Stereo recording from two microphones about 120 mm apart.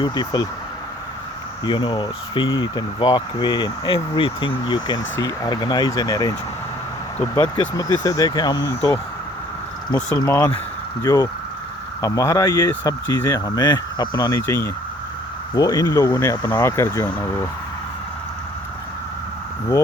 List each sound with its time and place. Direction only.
0.0 s speech: 35° left (ahead or behind)
1.6 s speech: 40° left (ahead or behind)
7.2 s speech: 15° left (ahead or behind)
7.5 s speech: 35° left (ahead or behind)
8.7 s speech: 15° left (ahead or behind)
10.2 s speech: 25° left (ahead or behind)
14.4 s speech: 20° left (ahead or behind)
15.5 s speech: 30° left (ahead or behind)